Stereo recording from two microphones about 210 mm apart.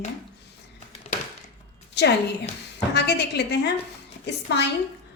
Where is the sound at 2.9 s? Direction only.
55° left (ahead or behind).